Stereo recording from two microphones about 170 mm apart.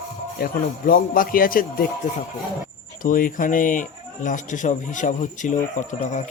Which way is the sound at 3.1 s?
50° left (ahead or behind).